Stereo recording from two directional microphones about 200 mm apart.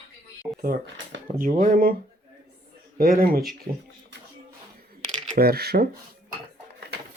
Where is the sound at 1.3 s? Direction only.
40° right (ahead or behind).